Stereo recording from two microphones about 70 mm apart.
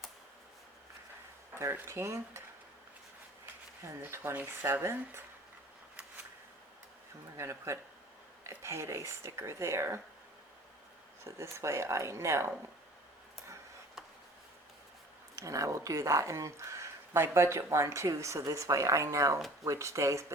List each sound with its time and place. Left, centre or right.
1.7 s speech: right
4.0 s speech: right
7.3 s speech: right
11.2 s speech: right
15.4 s speech: right